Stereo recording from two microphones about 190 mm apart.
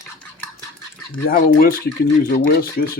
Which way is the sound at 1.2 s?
50° left (ahead or behind).